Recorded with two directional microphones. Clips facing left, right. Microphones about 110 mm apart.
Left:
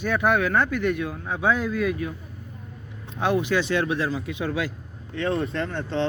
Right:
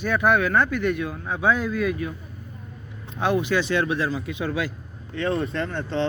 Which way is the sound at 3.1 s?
10° left (ahead or behind).